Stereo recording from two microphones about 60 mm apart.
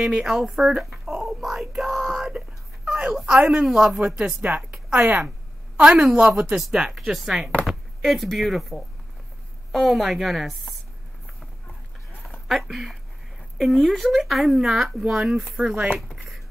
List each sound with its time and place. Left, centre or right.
0.0 s speech: centre
1.4 s whispering: centre
2.3 s a sound: centre
3.4 s speech: centre
4.4 s a woman's voice: right
5.8 s speech: centre
12.4 s speech: centre